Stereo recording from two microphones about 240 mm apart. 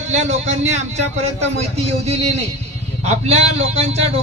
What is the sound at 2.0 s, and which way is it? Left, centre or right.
A man's voice, right.